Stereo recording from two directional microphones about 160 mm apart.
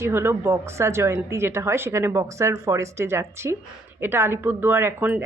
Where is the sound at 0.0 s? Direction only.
15° right (ahead or behind).